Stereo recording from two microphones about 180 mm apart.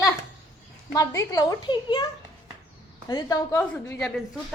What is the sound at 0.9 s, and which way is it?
Speech, 20° left (ahead or behind).